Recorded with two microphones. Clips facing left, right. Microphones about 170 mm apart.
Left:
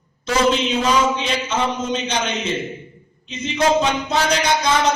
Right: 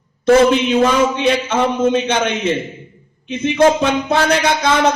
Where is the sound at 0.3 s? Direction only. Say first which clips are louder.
Right 7 dB; 55° right (ahead or behind).